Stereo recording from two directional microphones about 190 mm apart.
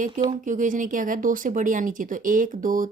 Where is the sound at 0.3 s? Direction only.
40° right (ahead or behind).